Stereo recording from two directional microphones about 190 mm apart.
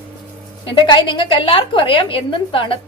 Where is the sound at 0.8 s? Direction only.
25° left (ahead or behind).